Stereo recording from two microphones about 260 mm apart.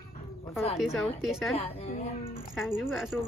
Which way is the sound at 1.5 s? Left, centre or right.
Left.